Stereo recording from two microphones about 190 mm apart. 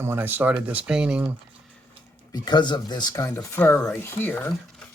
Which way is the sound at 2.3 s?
20° left (ahead or behind).